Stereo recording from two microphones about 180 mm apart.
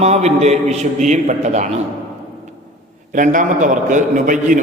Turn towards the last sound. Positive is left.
turn(degrees=-45)  # may be behind; listen again after turning